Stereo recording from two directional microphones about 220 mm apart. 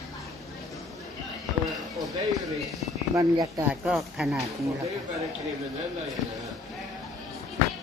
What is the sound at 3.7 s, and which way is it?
Speech, 5° right (ahead or behind).